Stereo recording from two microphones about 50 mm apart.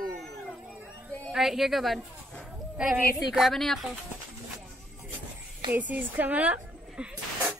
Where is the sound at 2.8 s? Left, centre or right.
Right.